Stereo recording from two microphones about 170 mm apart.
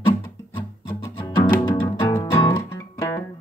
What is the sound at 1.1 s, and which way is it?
Music, 25° left (ahead or behind).